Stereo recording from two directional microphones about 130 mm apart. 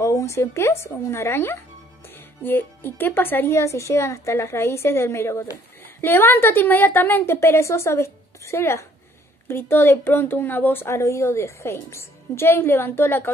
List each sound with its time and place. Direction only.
0.0 s speech: 20° left (ahead or behind)